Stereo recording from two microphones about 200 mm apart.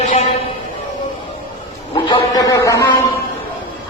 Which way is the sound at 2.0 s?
20° left (ahead or behind).